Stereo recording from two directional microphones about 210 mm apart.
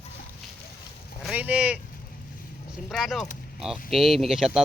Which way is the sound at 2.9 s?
Centre (ahead or behind).